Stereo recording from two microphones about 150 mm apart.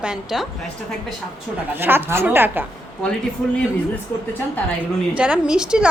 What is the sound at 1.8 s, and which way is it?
Speech, 15° right (ahead or behind).